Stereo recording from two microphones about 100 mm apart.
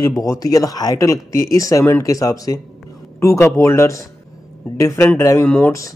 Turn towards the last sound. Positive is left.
turn(degrees=10)  # may be behind; listen again after turning